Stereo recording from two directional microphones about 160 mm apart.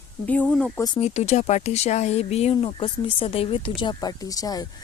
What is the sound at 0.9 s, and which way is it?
A woman's voice, 40° left (ahead or behind).